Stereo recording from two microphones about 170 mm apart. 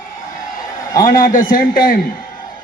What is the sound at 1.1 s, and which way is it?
Speech, 55° left (ahead or behind).